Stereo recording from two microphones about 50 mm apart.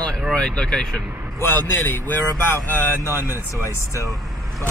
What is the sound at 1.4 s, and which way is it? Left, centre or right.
Speech, left.